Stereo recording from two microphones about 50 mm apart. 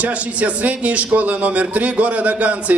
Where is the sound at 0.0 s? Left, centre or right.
Right.